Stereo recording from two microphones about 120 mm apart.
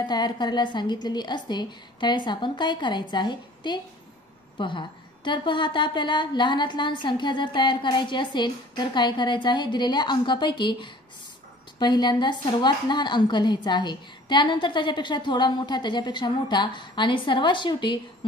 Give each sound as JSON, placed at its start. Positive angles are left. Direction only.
{"t": 0.0, "sound": "a woman's voice", "side_deg": 35}